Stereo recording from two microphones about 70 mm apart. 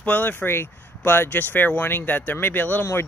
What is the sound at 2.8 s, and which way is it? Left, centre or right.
Speech, left.